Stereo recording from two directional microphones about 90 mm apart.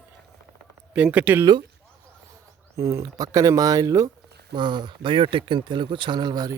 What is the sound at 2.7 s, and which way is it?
Speech, 35° right (ahead or behind).